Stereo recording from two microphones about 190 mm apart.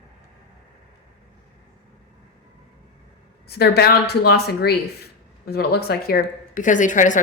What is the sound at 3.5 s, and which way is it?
A woman's voice, 55° left (ahead or behind).